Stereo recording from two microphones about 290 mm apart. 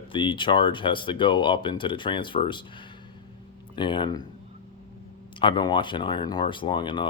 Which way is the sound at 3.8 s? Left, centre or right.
Centre.